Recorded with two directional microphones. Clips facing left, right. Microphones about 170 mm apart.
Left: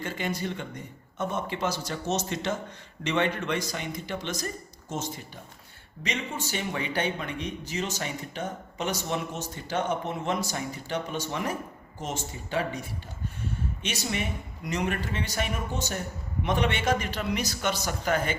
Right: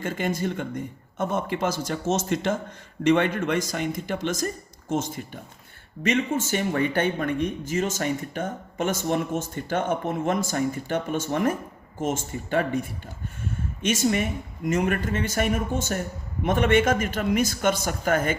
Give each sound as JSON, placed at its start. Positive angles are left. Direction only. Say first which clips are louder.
{"t": 0.0, "sound": "speech", "louder": "right 5 dB", "side_deg": -50}
{"t": 13.8, "sound": "speech", "louder": "right 10 dB", "side_deg": -50}